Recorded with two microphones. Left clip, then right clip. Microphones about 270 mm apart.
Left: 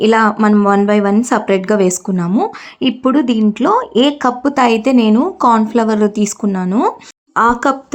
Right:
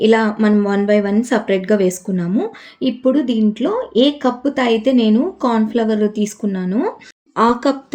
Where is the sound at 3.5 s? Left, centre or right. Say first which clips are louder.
Left 7 dB; centre.